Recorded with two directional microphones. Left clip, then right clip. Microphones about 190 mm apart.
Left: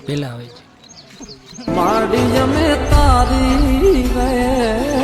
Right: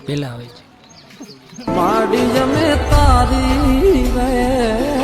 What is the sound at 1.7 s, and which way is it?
Music, centre (ahead or behind).